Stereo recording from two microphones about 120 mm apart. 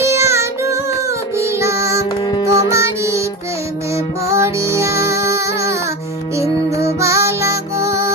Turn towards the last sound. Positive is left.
turn(degrees=-25)  # may be behind; listen again after turning